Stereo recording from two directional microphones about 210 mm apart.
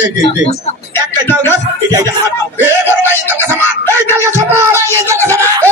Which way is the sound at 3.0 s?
10° right (ahead or behind).